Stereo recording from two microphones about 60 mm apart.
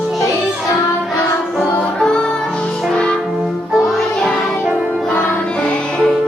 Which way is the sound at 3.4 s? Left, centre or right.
Centre.